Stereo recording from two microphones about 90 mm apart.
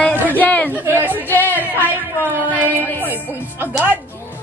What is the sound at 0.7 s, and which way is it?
Speech, 20° right (ahead or behind).